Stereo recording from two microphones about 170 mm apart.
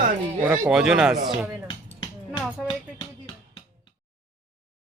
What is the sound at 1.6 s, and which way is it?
Music, 30° left (ahead or behind).